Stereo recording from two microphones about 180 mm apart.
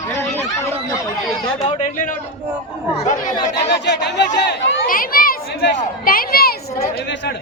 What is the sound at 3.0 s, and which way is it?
Speech, 40° left (ahead or behind).